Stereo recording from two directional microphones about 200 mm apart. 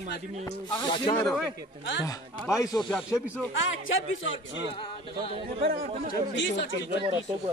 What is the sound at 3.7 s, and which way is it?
Speech, 80° left.